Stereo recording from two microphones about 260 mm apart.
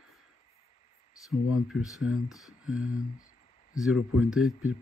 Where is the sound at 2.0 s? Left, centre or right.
Left.